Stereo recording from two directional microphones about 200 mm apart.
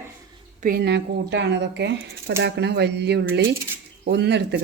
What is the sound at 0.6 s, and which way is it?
Speech, 50° right (ahead or behind).